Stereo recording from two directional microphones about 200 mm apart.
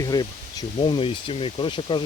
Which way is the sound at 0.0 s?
20° left (ahead or behind).